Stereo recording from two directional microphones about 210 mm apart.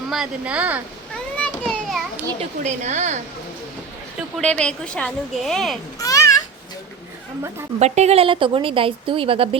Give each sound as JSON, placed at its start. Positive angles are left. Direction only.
{"t": 0.1, "sound": "a woman's voice", "side_deg": -5}
{"t": 1.4, "sound": "children playing", "side_deg": 5}
{"t": 2.4, "sound": "a woman's voice", "side_deg": -35}
{"t": 4.4, "sound": "a woman's voice", "side_deg": 5}
{"t": 6.0, "sound": "children playing", "side_deg": 15}
{"t": 7.8, "sound": "speech", "side_deg": -30}